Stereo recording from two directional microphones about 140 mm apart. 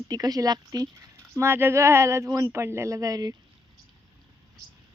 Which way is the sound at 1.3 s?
15° right (ahead or behind).